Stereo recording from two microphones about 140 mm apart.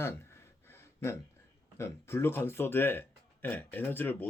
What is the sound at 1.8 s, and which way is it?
Speech, 20° left (ahead or behind).